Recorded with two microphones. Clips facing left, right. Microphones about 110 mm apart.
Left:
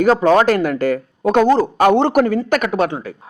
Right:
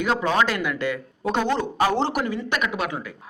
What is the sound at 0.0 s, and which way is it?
A man's voice, 45° left (ahead or behind).